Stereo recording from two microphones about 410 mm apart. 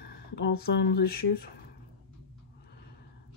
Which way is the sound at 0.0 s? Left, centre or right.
Left.